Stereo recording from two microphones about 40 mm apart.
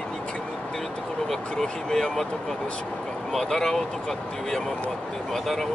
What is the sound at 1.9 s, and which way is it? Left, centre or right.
Speech, centre.